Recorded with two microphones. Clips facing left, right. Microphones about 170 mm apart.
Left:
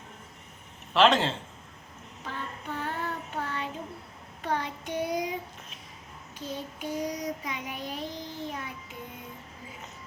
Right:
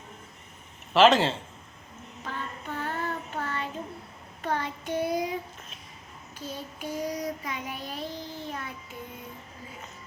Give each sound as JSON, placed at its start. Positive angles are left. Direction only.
{"t": 0.9, "sound": "speech", "side_deg": 0}
{"t": 2.2, "sound": "child singing", "side_deg": 15}
{"t": 6.4, "sound": "child singing", "side_deg": 20}